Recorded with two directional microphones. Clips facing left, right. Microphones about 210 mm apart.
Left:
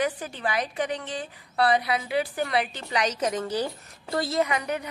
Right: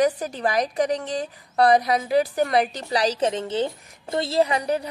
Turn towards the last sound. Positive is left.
turn(degrees=-35)  # may be behind; listen again after turning